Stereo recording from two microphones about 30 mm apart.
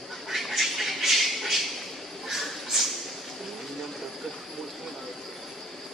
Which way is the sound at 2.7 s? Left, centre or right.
Centre.